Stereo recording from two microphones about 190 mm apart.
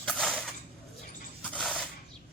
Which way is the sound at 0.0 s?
5° left (ahead or behind).